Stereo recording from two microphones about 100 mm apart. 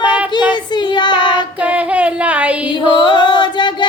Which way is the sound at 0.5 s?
50° left (ahead or behind).